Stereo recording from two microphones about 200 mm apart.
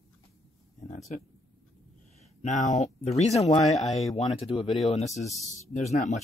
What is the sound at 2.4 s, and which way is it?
Speech, 35° left (ahead or behind).